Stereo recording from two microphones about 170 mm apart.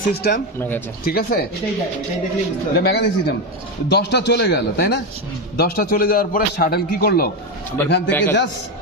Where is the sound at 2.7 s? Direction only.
75° left (ahead or behind).